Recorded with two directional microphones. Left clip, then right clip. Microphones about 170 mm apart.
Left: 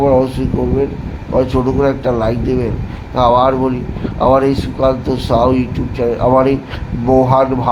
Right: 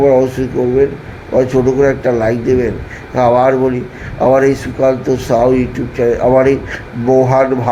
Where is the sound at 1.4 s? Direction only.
15° right (ahead or behind).